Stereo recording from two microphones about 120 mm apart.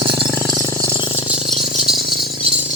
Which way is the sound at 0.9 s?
45° left (ahead or behind).